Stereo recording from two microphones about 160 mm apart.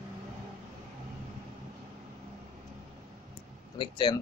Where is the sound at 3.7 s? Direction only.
30° left (ahead or behind).